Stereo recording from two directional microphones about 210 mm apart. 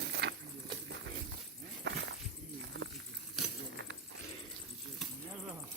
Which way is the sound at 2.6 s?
65° right (ahead or behind).